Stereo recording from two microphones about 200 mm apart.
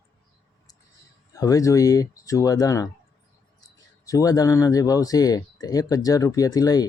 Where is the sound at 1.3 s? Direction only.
15° left (ahead or behind).